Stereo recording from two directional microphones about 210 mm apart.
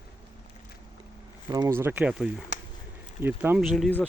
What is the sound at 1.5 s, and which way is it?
Speech, 15° right (ahead or behind).